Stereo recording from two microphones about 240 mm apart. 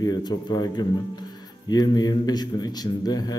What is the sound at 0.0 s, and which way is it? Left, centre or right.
A man's voice, centre.